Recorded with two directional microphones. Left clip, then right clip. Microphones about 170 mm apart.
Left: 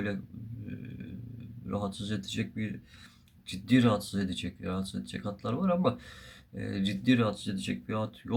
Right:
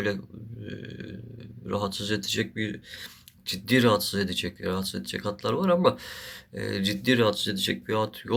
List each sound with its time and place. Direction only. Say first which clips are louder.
0.7 s burping: right 7 dB; 25° left (ahead or behind)
1.6 s speech: right 7 dB; 25° left (ahead or behind)